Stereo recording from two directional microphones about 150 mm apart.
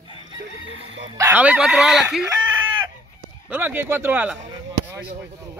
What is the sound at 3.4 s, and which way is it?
Speech, 15° right (ahead or behind).